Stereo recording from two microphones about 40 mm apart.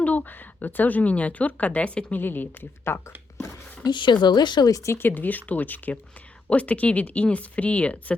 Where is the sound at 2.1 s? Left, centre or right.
Left.